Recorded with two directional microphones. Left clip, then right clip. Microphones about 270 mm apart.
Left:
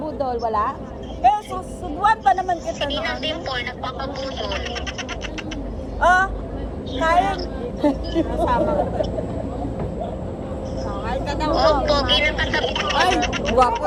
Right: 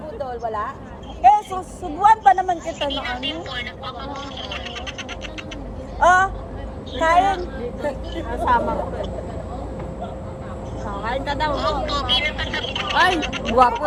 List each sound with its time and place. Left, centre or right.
0.2 s speech: left
1.2 s speech: right
2.8 s speech: left
6.0 s speech: right
7.3 s speech: left
8.3 s speech: right
10.8 s vehicle: right
11.5 s speech: left